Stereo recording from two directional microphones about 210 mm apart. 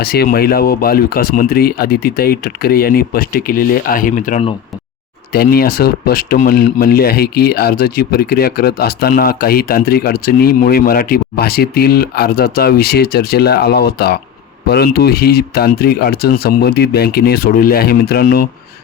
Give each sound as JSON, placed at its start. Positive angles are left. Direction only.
{"t": 0.0, "sound": "speech", "side_deg": 45}
{"t": 5.3, "sound": "speech", "side_deg": 45}